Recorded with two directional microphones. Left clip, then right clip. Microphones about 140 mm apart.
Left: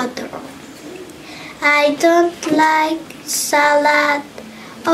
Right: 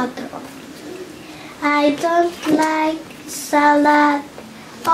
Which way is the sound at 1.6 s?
40° left (ahead or behind).